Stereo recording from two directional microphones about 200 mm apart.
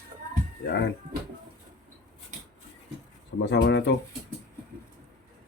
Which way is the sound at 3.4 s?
60° left (ahead or behind).